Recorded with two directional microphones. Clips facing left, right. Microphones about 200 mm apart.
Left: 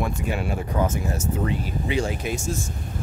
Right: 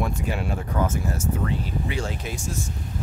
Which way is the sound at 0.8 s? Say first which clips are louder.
Left 1 dB; 20° left (ahead or behind).